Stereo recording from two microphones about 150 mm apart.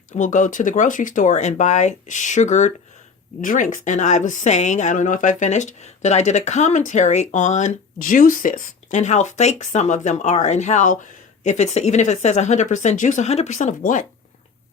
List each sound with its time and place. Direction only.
0.2 s speech: 55° left (ahead or behind)